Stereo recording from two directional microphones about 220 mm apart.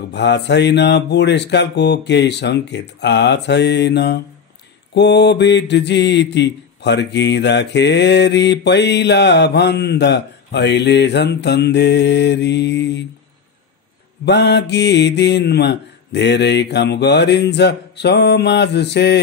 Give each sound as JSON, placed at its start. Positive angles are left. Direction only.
{"t": 0.1, "sound": "mantra", "side_deg": 50}
{"t": 14.2, "sound": "mantra", "side_deg": 50}